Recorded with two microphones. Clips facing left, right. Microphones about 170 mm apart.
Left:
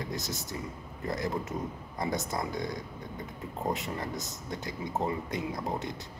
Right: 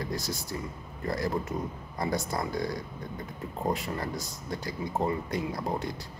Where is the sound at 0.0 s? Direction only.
20° left (ahead or behind).